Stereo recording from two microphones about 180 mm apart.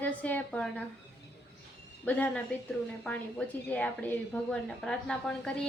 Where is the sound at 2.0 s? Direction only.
10° left (ahead or behind).